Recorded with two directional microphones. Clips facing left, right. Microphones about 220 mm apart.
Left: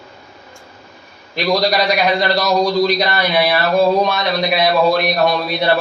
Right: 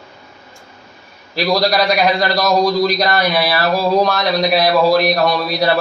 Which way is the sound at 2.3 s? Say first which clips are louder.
Right 1 dB; centre (ahead or behind).